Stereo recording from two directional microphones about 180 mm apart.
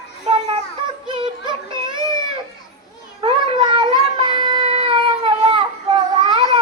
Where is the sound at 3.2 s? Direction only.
30° right (ahead or behind).